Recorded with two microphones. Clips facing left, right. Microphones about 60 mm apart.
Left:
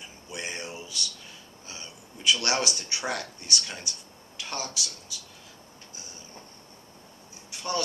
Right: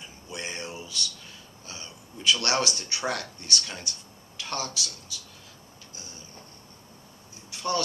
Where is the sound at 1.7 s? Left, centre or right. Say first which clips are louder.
Right 1 dB; centre.